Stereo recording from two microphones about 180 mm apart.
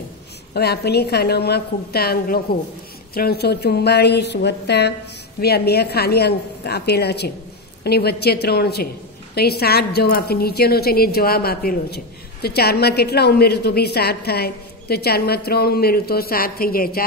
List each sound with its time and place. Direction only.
0.6 s a woman's voice: 65° left (ahead or behind)